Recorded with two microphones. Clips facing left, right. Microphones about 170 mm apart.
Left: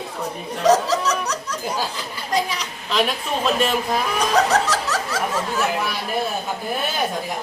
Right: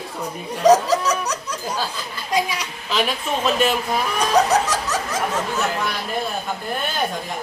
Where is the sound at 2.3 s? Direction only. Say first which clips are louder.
Right 1 dB; 10° right (ahead or behind).